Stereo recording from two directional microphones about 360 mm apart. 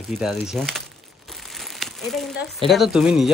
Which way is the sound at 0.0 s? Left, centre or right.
Centre.